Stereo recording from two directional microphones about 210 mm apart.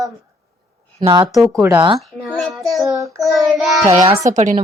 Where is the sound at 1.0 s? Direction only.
25° right (ahead or behind).